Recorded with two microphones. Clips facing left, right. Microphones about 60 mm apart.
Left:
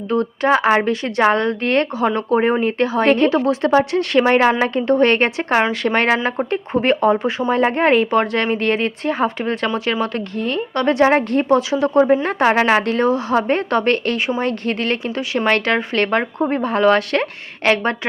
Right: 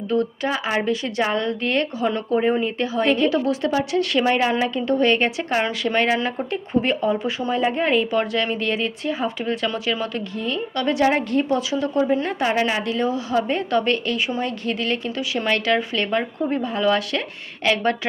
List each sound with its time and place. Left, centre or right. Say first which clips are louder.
0.1 s a woman's voice: left 6 dB; left